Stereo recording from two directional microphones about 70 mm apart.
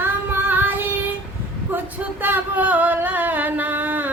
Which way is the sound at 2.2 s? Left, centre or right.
Right.